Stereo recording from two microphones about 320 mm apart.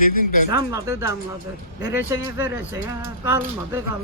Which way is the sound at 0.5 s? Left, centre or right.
Centre.